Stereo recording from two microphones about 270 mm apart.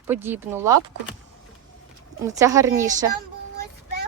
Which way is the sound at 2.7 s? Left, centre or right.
Right.